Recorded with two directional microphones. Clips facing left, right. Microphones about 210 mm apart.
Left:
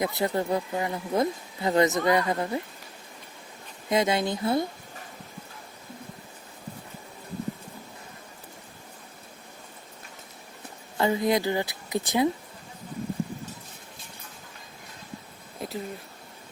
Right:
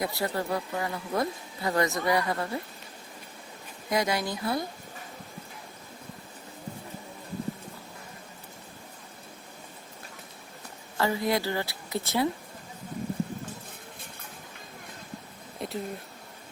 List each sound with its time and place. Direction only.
0.0 s speech: 20° left (ahead or behind)
3.8 s speech: 25° left (ahead or behind)
10.9 s a woman's voice: 20° left (ahead or behind)
15.6 s speech: centre (ahead or behind)